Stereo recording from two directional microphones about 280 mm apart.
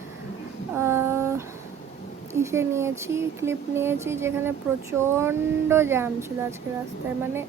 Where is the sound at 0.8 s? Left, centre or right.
Centre.